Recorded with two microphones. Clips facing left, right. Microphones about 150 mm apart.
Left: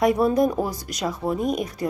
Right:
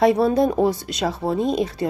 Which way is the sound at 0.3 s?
25° right (ahead or behind).